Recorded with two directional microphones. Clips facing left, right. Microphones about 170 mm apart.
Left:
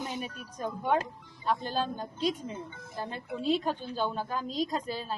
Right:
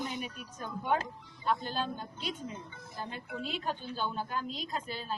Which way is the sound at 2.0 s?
35° left (ahead or behind).